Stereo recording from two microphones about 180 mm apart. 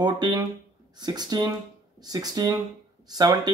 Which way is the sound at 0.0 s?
25° right (ahead or behind).